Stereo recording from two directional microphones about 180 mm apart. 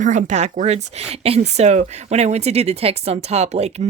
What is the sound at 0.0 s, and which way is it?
Speech, 45° right (ahead or behind).